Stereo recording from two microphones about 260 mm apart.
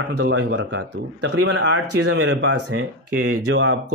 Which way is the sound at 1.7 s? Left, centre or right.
Right.